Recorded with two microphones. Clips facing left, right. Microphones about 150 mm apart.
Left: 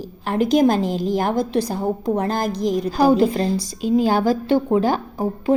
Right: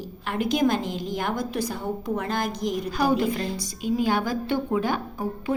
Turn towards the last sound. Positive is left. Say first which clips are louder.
# left 7 dB
turn(degrees=35)  # may be behind; listen again after turning